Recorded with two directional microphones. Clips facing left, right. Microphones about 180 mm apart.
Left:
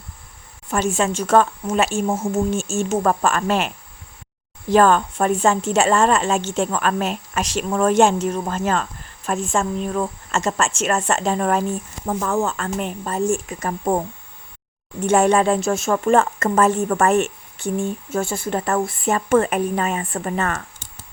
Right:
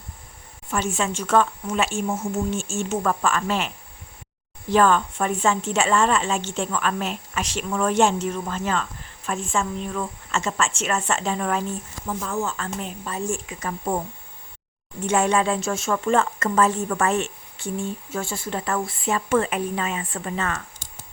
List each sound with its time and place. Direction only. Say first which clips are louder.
0.7 s a woman's voice: left 5 dB; 40° left (ahead or behind)
4.7 s a woman's voice: left 4 dB; 45° left (ahead or behind)
12.0 s a woman's voice: left 6 dB; 60° left (ahead or behind); by 14.0 s 45° left (ahead or behind)
15.0 s a woman's voice: left 5 dB; 55° left (ahead or behind)